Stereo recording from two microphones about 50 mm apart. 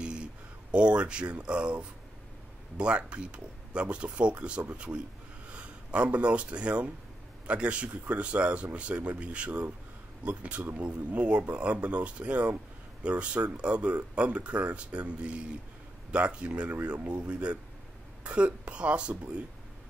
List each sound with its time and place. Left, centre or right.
0.0 s speech: right